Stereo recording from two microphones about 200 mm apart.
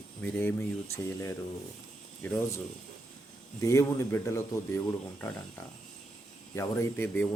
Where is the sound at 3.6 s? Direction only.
15° left (ahead or behind).